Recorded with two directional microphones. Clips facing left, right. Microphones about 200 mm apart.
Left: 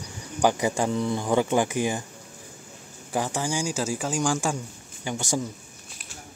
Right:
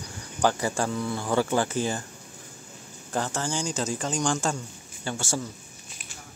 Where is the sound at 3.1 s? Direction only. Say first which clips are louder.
Left 2 dB; 10° left (ahead or behind).